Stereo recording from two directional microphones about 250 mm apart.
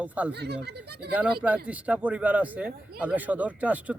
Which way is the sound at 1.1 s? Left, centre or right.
Centre.